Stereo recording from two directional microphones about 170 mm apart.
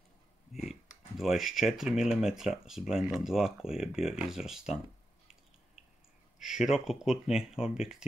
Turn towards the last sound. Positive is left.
turn(degrees=-5)  # may be behind; listen again after turning